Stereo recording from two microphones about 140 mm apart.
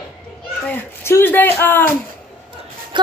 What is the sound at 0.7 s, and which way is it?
Speech, 15° left (ahead or behind).